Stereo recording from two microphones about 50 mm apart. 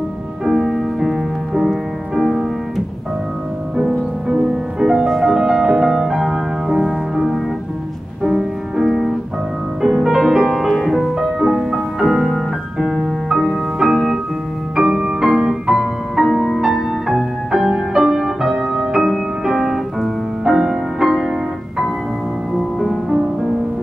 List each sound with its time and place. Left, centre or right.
0.5 s music: centre
3.7 s music: centre
22.8 s music: centre